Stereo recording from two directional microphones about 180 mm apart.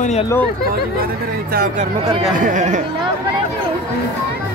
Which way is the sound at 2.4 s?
45° right (ahead or behind).